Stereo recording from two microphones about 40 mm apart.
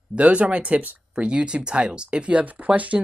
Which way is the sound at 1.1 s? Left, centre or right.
Right.